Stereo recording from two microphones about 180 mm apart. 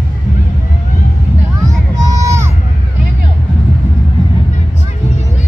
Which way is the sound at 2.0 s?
20° right (ahead or behind).